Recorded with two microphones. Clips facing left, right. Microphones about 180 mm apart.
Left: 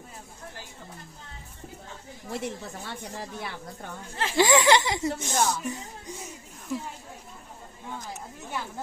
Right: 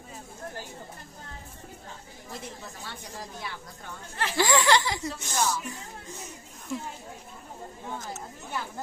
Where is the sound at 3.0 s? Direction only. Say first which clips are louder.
Left 2 dB; 60° left (ahead or behind).